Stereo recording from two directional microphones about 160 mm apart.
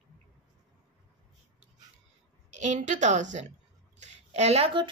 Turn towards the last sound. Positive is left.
turn(degrees=-35)  # may be behind; listen again after turning